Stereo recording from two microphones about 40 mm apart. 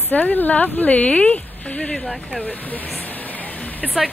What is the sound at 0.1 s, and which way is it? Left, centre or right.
Speech, left.